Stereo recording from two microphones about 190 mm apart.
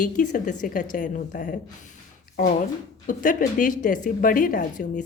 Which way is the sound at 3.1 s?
45° left (ahead or behind).